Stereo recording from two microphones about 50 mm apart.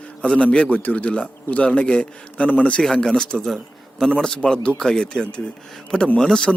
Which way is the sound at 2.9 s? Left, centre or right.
Centre.